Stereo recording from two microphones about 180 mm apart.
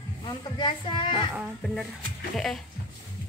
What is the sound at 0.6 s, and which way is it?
Speech, 25° left (ahead or behind).